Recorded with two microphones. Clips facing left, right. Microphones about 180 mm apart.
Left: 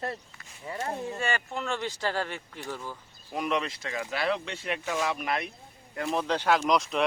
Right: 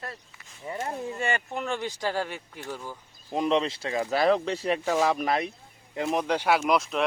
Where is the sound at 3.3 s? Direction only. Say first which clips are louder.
Right 5 dB; 30° right (ahead or behind).